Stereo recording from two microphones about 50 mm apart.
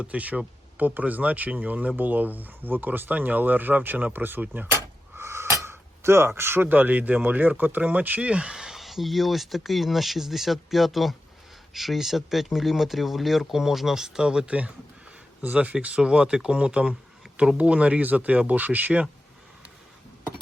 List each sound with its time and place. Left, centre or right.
0.0 s speech: right
4.1 s speech: right
5.1 s speech: right
8.2 s speech: centre
14.4 s speech: right